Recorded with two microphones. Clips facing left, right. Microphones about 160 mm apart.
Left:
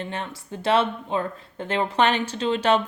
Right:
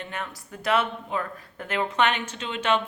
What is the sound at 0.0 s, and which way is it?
Speech, 30° left (ahead or behind).